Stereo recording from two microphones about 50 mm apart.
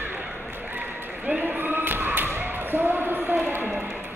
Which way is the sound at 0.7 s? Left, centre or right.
Right.